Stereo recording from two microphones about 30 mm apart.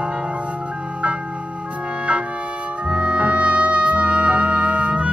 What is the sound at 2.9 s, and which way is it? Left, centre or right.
Music, right.